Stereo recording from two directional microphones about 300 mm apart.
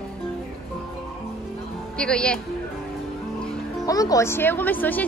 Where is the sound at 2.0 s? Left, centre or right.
Centre.